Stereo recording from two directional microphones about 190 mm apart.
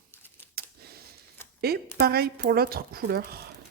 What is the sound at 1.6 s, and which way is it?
Speech, 55° right (ahead or behind).